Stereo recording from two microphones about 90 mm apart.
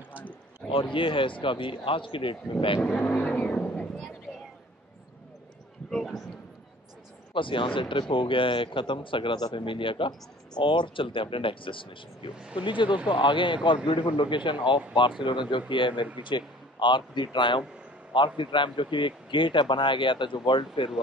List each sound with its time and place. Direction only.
0.6 s a man's voice: 5° left (ahead or behind)
0.9 s speech: 70° left (ahead or behind)
2.8 s vehicle: 15° left (ahead or behind)
5.9 s a sound: centre (ahead or behind)
7.3 s speech: 70° left (ahead or behind)
12.4 s speech: 10° right (ahead or behind)
12.6 s speech: 65° left (ahead or behind)
13.7 s speech: 75° left (ahead or behind)